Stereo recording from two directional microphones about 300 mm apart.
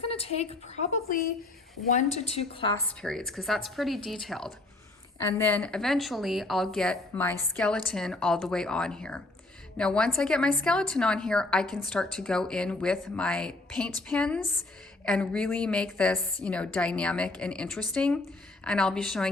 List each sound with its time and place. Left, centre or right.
0.1 s a woman's voice: centre
3.0 s speech: centre